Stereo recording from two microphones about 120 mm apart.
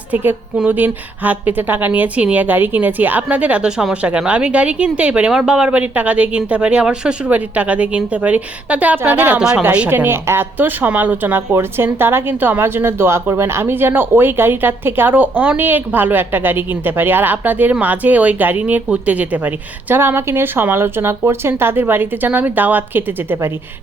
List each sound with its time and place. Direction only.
0.1 s a woman's voice: 15° right (ahead or behind)